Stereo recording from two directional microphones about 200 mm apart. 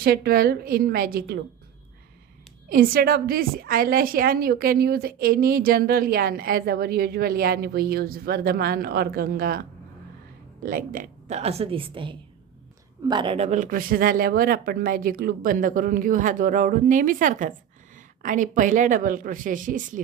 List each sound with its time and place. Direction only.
0.0 s a woman's voice: 50° right (ahead or behind)
2.6 s a woman's voice: 45° right (ahead or behind)
10.6 s a man's voice: 45° right (ahead or behind)